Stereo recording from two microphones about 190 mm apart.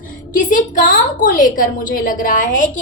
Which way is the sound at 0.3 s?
45° left (ahead or behind).